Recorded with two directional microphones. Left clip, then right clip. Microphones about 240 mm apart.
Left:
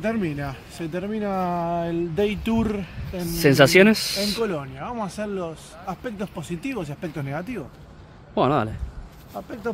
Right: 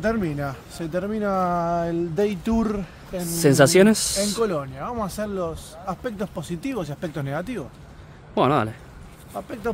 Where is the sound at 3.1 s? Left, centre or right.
Centre.